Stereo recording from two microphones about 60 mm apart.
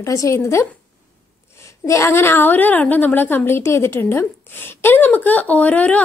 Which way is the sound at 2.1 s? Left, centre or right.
Left.